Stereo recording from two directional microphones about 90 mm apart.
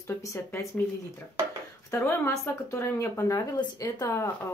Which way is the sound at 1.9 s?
30° left (ahead or behind).